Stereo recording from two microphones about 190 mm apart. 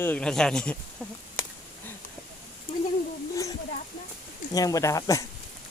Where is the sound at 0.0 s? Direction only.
5° left (ahead or behind).